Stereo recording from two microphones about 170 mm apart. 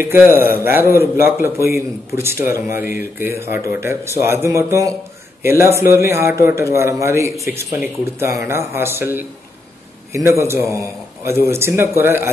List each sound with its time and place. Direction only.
0.0 s a man's voice: 15° right (ahead or behind)